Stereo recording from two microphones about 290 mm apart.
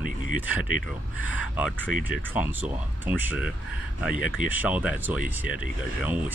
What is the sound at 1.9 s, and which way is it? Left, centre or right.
Speech, right.